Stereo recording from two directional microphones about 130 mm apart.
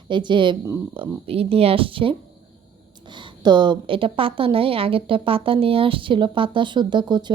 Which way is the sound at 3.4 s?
35° right (ahead or behind).